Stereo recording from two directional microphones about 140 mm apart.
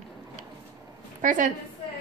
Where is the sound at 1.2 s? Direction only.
70° right (ahead or behind).